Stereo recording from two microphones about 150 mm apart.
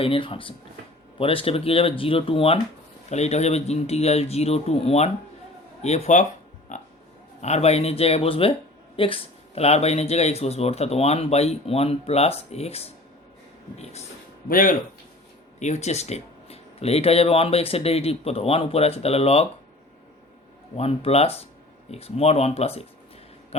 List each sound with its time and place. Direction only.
0.0 s speech: 35° left (ahead or behind)
6.7 s a sound: 55° left (ahead or behind)
7.4 s speech: 45° left (ahead or behind)
14.5 s speech: 65° left (ahead or behind)
15.5 s speech: 50° left (ahead or behind)
20.7 s speech: 45° left (ahead or behind)